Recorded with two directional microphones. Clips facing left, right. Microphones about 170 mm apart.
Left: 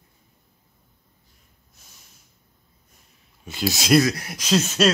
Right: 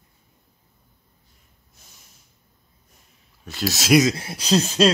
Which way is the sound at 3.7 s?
Centre (ahead or behind).